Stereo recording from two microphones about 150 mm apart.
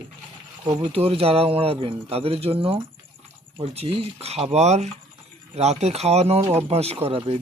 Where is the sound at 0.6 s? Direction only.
30° right (ahead or behind).